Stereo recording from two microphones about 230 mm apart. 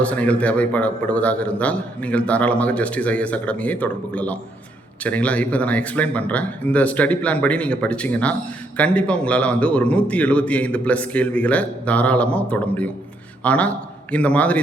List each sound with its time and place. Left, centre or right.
0.0 s a man's voice: centre